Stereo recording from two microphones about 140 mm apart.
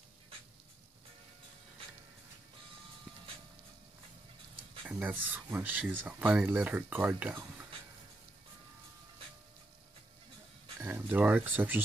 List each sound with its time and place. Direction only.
4.8 s speech: 10° right (ahead or behind)
10.8 s speech: 15° right (ahead or behind)